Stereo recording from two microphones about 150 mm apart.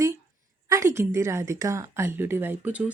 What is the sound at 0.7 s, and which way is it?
A woman's voice, 20° right (ahead or behind).